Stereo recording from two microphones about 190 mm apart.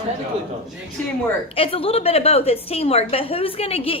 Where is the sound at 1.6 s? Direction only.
30° left (ahead or behind).